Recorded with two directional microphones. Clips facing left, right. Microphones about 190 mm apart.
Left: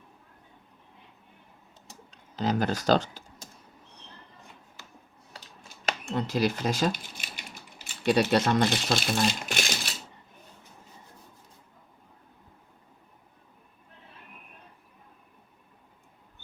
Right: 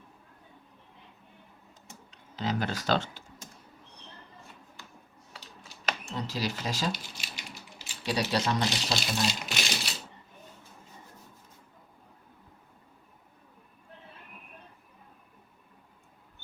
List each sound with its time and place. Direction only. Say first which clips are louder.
1.9 s typing: left 1 dB; 40° left (ahead or behind)
5.6 s a sound: left 2 dB; 55° left (ahead or behind)
7.9 s speech: left 7 dB; 55° left (ahead or behind)